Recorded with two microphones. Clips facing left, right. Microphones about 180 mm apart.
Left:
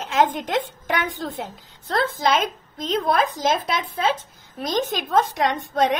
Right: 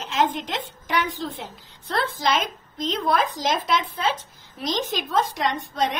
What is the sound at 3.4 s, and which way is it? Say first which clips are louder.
A woman's voice: left 1 dB; 50° left (ahead or behind).